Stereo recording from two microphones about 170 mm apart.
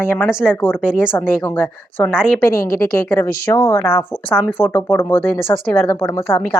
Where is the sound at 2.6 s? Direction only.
60° left (ahead or behind).